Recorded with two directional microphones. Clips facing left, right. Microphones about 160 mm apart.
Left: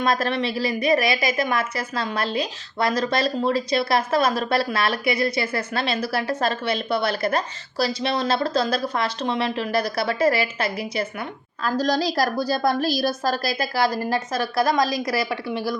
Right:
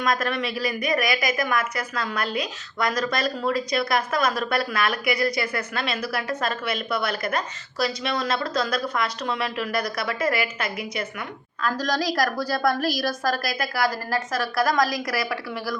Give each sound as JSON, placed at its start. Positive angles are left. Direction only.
{"t": 0.0, "sound": "a woman's voice", "side_deg": 30}